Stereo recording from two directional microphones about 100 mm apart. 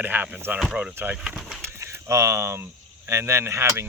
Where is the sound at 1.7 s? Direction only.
30° right (ahead or behind).